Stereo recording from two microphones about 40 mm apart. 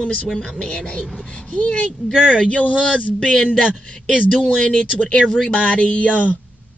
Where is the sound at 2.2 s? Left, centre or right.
Left.